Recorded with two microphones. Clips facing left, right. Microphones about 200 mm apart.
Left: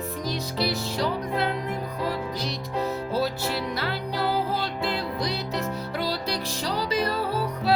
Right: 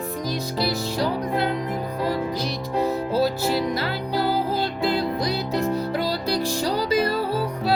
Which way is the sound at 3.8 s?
40° right (ahead or behind).